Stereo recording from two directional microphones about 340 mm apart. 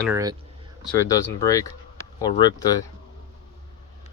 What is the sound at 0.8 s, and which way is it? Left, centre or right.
Speech, centre.